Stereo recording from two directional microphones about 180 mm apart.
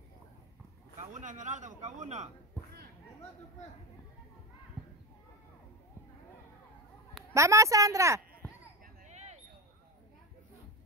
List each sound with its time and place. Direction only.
1.1 s speech: 45° right (ahead or behind)
7.3 s a woman's voice: 15° right (ahead or behind)
8.8 s a sound: 40° right (ahead or behind)